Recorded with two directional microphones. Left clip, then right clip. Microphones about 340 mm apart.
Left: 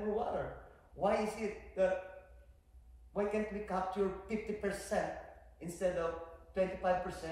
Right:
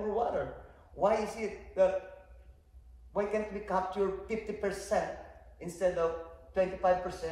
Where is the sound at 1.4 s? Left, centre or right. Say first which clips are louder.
Right 3 dB; right.